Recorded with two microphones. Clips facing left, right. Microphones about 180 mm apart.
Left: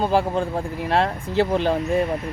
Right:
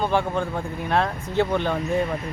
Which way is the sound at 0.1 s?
35° left (ahead or behind).